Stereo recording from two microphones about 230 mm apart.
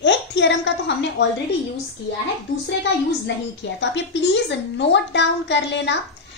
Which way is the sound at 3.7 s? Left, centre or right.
Left.